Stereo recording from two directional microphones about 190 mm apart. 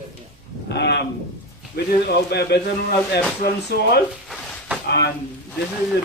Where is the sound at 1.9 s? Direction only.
55° left (ahead or behind).